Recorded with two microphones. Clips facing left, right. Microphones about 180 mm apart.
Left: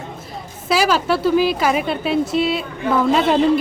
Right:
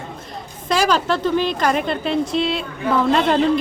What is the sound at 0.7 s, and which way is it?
A man's voice, 5° left (ahead or behind).